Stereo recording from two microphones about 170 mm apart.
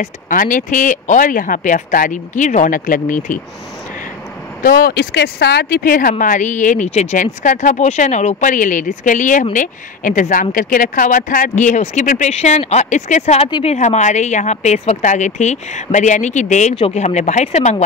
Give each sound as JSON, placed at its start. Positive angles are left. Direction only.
{"t": 0.0, "sound": "speech", "side_deg": 50}
{"t": 4.6, "sound": "speech", "side_deg": 65}
{"t": 13.7, "sound": "speech", "side_deg": 45}